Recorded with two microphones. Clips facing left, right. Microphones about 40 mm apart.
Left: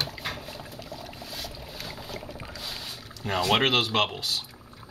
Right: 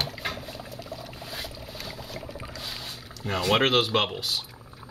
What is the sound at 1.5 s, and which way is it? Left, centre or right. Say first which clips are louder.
Rodents: right 1 dB; centre.